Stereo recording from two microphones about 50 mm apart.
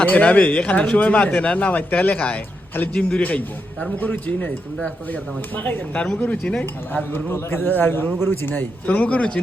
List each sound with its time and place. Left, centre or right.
0.0 s speech: left
5.9 s speech: left
7.1 s a man's voice: left
9.0 s speech: left